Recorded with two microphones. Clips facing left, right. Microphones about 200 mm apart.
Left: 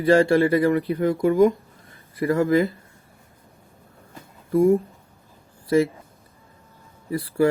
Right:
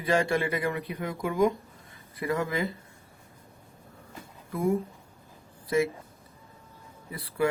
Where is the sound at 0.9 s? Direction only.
50° left (ahead or behind).